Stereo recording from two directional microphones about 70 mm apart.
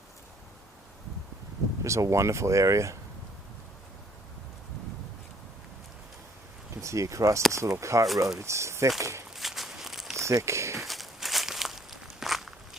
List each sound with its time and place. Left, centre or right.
1.8 s speech: right
6.8 s speech: right
9.3 s walk: centre
10.2 s speech: right
10.8 s walk: centre